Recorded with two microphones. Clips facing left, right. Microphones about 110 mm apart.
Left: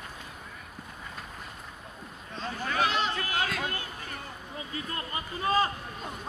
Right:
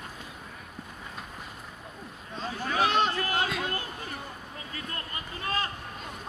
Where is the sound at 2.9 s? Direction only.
60° right (ahead or behind).